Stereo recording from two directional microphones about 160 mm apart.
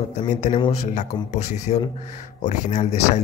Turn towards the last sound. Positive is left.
turn(degrees=45)  # may be behind; listen again after turning